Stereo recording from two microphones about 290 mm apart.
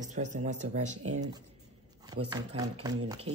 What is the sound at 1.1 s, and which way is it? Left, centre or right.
Speech, centre.